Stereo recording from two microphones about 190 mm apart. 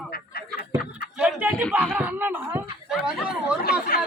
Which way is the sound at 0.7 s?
5° right (ahead or behind).